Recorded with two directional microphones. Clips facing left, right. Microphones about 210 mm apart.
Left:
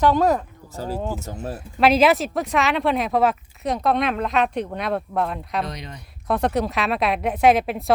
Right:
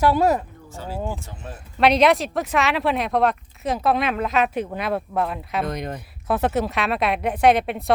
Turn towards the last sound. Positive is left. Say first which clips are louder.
# even
turn(degrees=0)  # may be behind; listen again after turning